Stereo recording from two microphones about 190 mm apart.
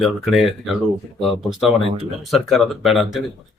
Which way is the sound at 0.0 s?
Centre (ahead or behind).